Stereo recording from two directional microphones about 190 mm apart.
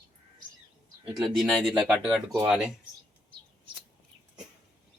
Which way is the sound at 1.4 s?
Centre (ahead or behind).